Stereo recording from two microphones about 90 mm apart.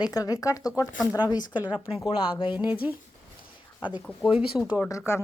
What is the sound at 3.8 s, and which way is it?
Speech, 60° left (ahead or behind).